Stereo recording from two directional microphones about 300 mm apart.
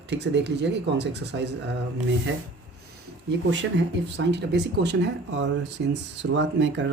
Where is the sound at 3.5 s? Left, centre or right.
Right.